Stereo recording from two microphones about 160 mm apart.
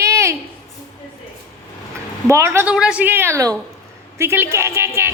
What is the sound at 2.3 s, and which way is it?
A woman's voice, 20° right (ahead or behind).